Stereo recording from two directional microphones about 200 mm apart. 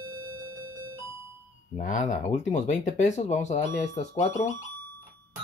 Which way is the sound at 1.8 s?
40° left (ahead or behind).